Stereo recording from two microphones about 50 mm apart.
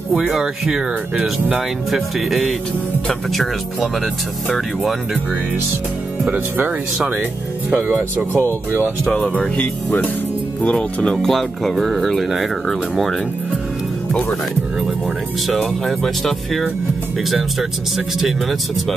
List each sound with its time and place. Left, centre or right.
0.1 s speech: centre
6.2 s speech: right
7.7 s speech: right
9.0 s speech: centre
10.6 s speech: left
11.2 s speech: centre
15.4 s speech: centre